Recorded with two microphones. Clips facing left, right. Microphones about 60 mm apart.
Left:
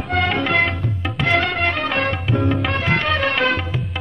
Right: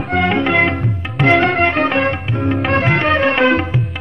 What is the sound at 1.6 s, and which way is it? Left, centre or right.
Music, right.